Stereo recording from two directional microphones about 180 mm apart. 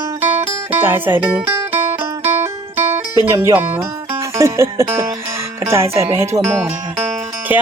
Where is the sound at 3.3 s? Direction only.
15° right (ahead or behind).